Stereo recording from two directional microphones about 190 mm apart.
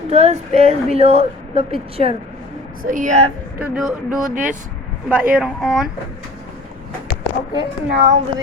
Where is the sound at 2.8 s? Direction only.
45° right (ahead or behind).